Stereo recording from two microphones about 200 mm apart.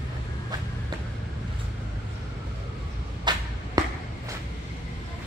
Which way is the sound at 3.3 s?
20° right (ahead or behind).